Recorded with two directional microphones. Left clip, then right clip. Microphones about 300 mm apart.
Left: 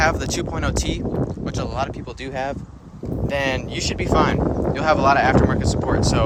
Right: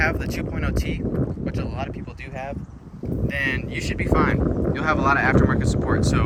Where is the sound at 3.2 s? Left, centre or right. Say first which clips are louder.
Left 3 dB; centre.